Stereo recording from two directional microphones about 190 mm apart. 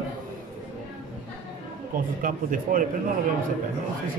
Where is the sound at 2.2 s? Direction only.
45° right (ahead or behind).